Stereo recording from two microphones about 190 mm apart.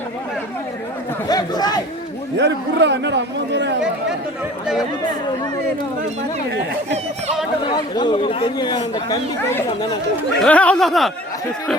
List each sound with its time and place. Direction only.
1.3 s a man's voice: 20° left (ahead or behind)
2.4 s a man's voice: 65° right (ahead or behind)
4.6 s speech: 5° right (ahead or behind)
7.9 s a man's voice: 25° left (ahead or behind)
10.4 s speech: 5° left (ahead or behind)